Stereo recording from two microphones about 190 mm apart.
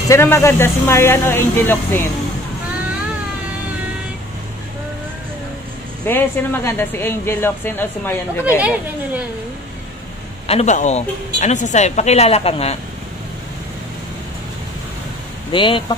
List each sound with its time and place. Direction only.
0.1 s speech: 15° left (ahead or behind)
6.0 s speech: 10° left (ahead or behind)
8.5 s speech: 10° right (ahead or behind)
10.5 s a woman's voice: 35° left (ahead or behind)
15.5 s speech: 25° left (ahead or behind)